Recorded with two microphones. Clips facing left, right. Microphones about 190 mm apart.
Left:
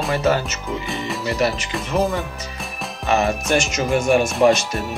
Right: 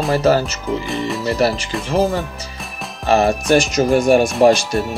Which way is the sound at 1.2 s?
35° right (ahead or behind).